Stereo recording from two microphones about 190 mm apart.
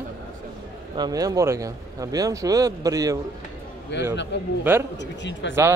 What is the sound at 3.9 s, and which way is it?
A man's voice, 65° left (ahead or behind).